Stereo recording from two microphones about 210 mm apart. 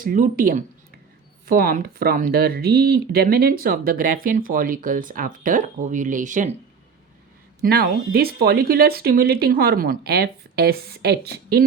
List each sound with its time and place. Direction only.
0.0 s speech: 40° right (ahead or behind)
7.6 s speech: 45° right (ahead or behind)